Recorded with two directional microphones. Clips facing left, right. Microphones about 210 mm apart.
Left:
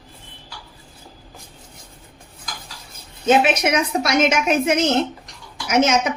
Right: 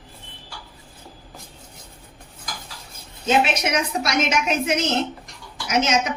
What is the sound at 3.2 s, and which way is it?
A woman's voice, 50° left (ahead or behind).